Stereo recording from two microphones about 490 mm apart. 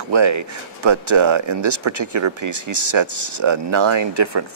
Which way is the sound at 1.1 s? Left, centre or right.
Right.